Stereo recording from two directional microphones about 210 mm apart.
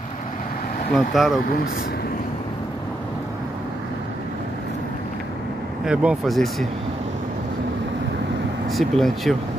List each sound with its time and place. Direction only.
0.9 s speech: centre (ahead or behind)
5.9 s speech: centre (ahead or behind)
8.6 s speech: centre (ahead or behind)